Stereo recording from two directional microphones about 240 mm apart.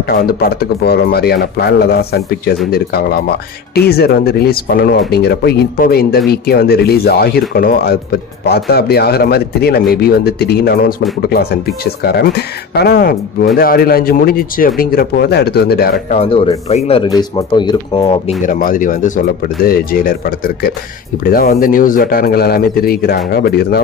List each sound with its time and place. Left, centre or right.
0.0 s speech: left
16.2 s speech: left
18.4 s speech: left